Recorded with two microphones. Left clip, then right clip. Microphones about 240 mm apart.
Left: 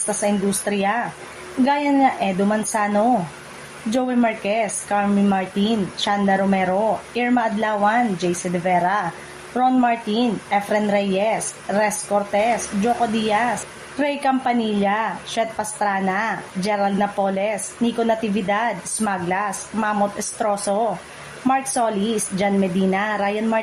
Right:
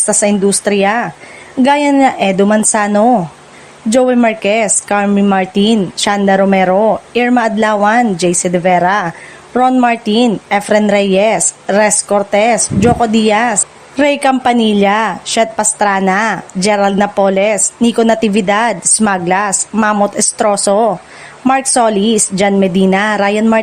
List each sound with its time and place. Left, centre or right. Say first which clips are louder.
0.0 s a woman's voice: right 10 dB; right